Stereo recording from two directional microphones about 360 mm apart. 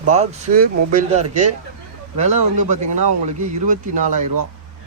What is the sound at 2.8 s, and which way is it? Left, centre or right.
Speech, right.